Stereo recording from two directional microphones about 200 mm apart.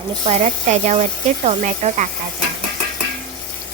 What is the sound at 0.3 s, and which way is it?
Speech, 35° right (ahead or behind).